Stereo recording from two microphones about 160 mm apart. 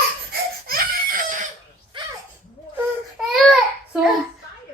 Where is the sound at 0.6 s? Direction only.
65° right (ahead or behind).